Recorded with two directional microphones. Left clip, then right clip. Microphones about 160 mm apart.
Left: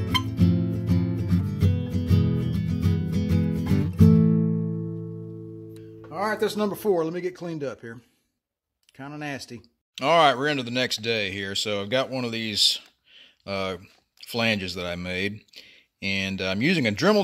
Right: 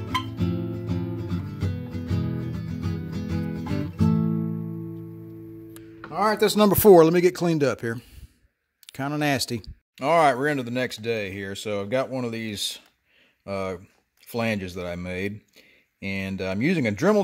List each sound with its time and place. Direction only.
0.0 s music: 90° left; by 4.6 s 70° left (ahead or behind)
6.1 s music: 35° right (ahead or behind)
6.6 s speech: 90° right
9.9 s speech: 10° right (ahead or behind)